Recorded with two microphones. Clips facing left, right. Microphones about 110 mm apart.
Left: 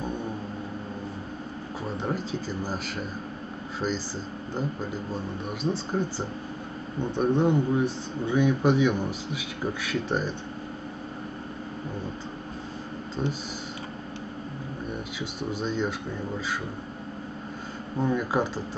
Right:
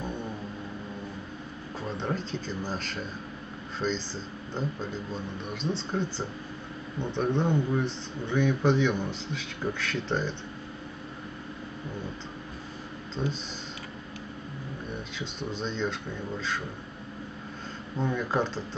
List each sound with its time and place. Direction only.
2.0 s speech: 10° left (ahead or behind)
13.2 s speech: 15° left (ahead or behind)
15.1 s speech: 10° left (ahead or behind)
17.9 s speech: 10° left (ahead or behind)